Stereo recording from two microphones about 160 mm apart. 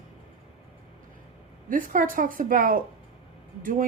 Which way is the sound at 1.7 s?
60° right (ahead or behind).